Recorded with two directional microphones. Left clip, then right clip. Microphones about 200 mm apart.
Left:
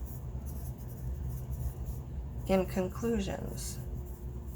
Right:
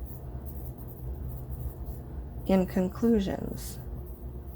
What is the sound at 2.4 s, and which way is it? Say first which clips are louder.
Speech: right 3 dB; 35° right (ahead or behind).